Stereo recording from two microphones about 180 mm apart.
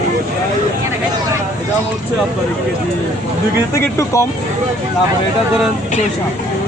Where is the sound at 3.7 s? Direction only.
15° left (ahead or behind).